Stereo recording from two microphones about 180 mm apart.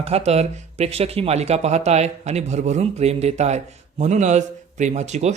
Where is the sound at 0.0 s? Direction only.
35° right (ahead or behind).